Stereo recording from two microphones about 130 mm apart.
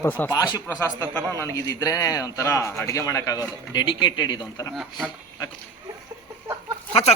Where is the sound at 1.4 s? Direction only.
20° left (ahead or behind).